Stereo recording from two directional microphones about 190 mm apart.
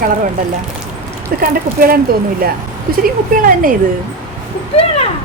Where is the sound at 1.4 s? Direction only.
50° right (ahead or behind).